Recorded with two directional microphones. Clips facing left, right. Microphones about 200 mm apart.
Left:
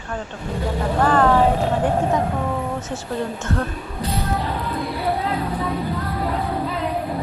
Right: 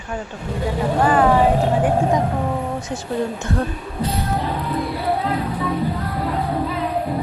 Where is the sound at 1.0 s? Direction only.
10° right (ahead or behind).